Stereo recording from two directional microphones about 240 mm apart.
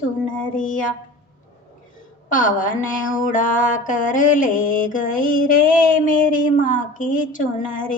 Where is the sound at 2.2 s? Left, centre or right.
Left.